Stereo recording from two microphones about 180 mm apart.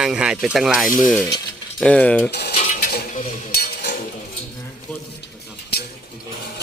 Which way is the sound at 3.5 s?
60° left (ahead or behind).